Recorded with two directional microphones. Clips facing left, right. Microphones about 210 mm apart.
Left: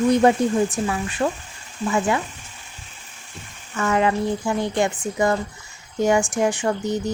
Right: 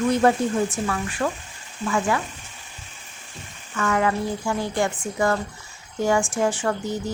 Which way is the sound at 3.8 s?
25° left (ahead or behind).